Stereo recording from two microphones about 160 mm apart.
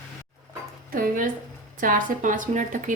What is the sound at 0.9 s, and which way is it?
A woman's voice, 60° right (ahead or behind).